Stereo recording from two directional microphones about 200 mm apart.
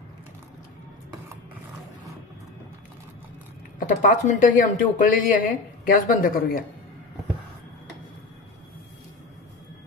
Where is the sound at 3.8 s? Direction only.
40° left (ahead or behind).